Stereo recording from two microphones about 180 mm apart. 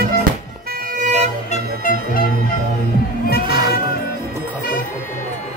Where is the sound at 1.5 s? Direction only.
50° left (ahead or behind).